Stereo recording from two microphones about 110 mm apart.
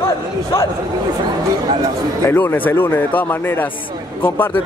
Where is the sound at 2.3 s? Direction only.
20° left (ahead or behind).